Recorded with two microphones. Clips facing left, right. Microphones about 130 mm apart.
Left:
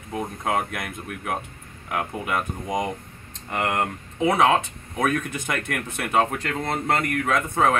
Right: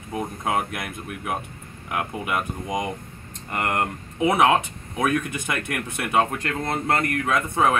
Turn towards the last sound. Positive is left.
turn(degrees=-10)  # may be behind; listen again after turning